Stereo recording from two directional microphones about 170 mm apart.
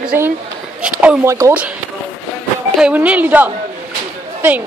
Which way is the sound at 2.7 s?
5° right (ahead or behind).